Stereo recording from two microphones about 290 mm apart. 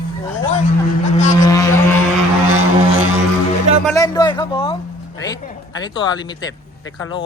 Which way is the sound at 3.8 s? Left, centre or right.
Centre.